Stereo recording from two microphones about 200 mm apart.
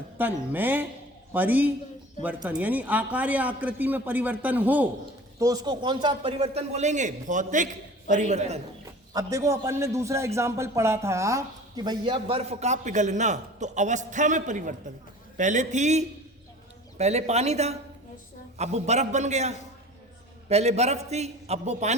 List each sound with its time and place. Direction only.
0.2 s a man's voice: 10° right (ahead or behind); by 8.6 s 35° right (ahead or behind)
9.1 s a man's voice: 15° right (ahead or behind); by 21.9 s 35° right (ahead or behind)